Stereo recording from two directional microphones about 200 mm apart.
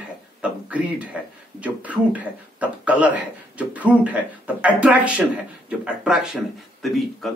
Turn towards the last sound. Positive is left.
turn(degrees=0)  # may be behind; listen again after turning